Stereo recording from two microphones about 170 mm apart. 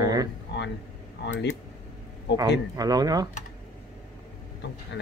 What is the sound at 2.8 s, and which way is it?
Speech, 20° right (ahead or behind).